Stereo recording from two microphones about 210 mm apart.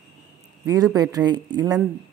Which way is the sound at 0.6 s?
15° right (ahead or behind).